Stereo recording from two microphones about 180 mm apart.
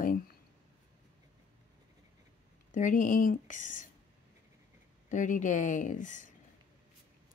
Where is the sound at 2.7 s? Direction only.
45° left (ahead or behind).